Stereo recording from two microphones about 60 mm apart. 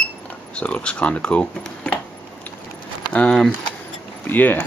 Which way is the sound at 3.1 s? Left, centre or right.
Centre.